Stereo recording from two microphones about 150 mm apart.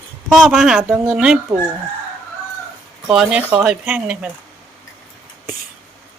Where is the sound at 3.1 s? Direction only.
5° right (ahead or behind).